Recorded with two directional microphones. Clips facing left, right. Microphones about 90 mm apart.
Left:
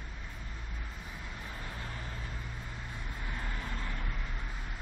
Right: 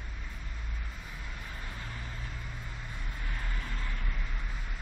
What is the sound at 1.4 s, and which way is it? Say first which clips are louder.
Vehicle: left 2 dB; 20° left (ahead or behind).